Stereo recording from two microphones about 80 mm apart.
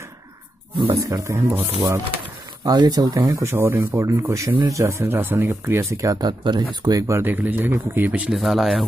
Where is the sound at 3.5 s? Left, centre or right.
Right.